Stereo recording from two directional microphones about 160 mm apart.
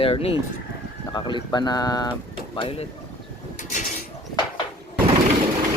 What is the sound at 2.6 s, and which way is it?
Speech, 35° left (ahead or behind).